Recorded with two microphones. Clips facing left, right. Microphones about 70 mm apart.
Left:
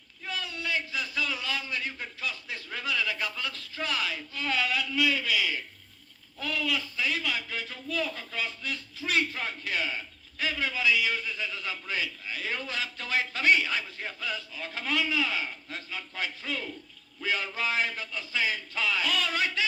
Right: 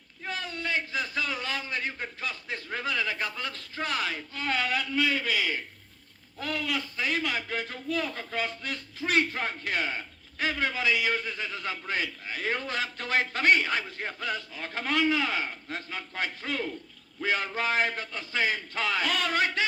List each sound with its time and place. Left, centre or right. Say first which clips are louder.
0.3 s a man's voice: right 1 dB; right